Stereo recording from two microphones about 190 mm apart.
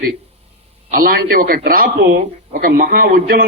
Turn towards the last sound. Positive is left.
turn(degrees=-50)  # may be behind; listen again after turning